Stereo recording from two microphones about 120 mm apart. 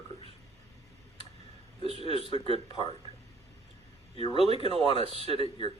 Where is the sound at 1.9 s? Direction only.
55° right (ahead or behind).